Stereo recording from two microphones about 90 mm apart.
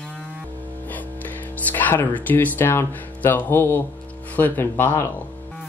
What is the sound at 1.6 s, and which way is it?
Speech, 20° left (ahead or behind).